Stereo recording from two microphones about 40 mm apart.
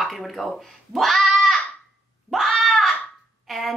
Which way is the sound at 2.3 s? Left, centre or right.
Centre.